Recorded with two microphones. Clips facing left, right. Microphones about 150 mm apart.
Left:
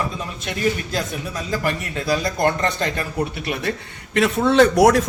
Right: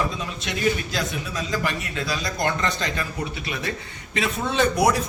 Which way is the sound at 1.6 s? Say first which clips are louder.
Left 3 dB; 50° left (ahead or behind).